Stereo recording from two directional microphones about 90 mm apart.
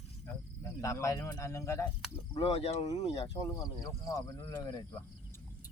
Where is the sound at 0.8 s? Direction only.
40° left (ahead or behind).